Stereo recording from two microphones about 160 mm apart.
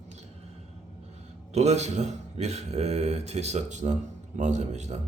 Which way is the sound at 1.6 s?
45° right (ahead or behind).